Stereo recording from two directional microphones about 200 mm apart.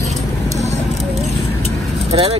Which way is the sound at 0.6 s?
35° right (ahead or behind).